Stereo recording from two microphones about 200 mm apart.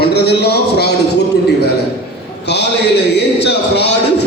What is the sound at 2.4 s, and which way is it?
A man's voice, 60° left (ahead or behind).